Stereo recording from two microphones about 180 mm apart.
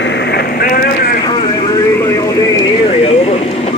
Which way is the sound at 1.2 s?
20° left (ahead or behind).